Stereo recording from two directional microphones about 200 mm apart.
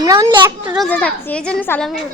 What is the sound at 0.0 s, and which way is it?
Speech, 20° right (ahead or behind).